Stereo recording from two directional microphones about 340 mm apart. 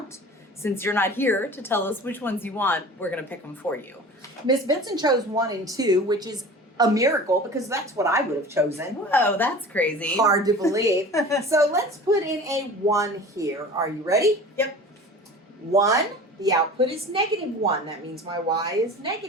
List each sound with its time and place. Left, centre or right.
0.6 s a woman's voice: centre
4.4 s speech: centre
9.0 s a woman's voice: centre
10.2 s speech: centre
11.1 s a woman's voice: centre
11.4 s speech: centre
15.7 s speech: centre